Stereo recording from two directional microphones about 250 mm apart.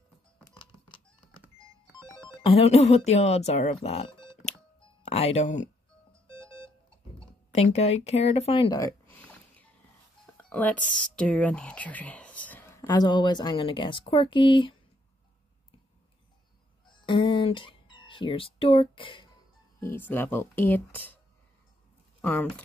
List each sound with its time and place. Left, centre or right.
0.6 s a sound: centre
2.2 s speech: left
7.5 s speech: left
9.1 s a sound: centre
10.3 s speech: centre
16.8 s speech: centre
19.8 s speech: centre
22.2 s speech: centre